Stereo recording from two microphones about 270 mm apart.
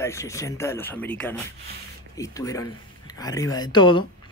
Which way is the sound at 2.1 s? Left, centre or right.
Centre.